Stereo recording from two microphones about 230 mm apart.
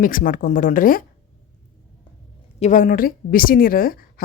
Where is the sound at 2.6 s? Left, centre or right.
Left.